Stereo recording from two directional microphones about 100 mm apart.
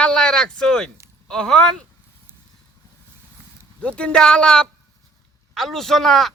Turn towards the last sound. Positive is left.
turn(degrees=0)  # may be behind; listen again after turning